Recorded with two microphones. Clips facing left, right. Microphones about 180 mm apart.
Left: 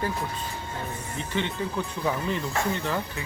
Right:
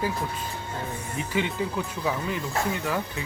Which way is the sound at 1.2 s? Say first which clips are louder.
Right 2 dB; 10° right (ahead or behind).